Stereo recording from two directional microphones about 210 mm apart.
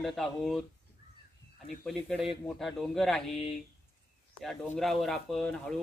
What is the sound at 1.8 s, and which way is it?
Speech, centre (ahead or behind).